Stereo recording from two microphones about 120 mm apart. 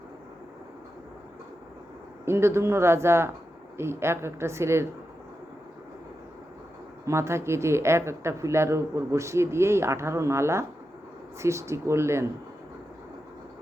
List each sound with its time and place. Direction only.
2.2 s speech: 20° right (ahead or behind)
7.0 s speech: 25° right (ahead or behind)